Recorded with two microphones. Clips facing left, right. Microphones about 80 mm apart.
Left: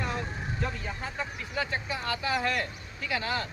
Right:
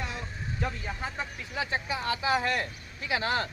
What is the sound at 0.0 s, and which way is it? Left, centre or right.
Vehicle, left.